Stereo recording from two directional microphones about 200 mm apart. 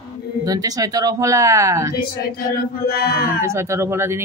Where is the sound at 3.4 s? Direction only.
15° right (ahead or behind).